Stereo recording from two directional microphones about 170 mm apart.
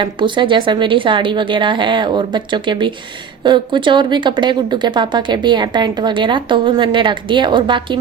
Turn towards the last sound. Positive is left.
turn(degrees=-30)  # may be behind; listen again after turning